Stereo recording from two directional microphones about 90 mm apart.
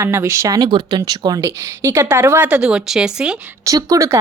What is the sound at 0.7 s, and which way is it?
Speech, 55° right (ahead or behind).